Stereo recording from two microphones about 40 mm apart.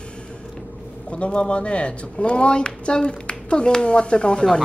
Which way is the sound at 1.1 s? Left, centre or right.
Left.